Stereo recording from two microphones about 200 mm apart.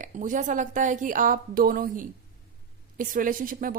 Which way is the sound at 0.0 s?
40° right (ahead or behind).